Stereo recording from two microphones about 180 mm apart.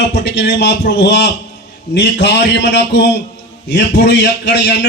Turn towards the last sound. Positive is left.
turn(degrees=70)  # may be behind; listen again after turning